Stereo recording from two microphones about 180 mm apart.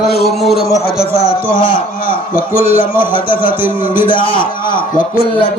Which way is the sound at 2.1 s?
50° left (ahead or behind).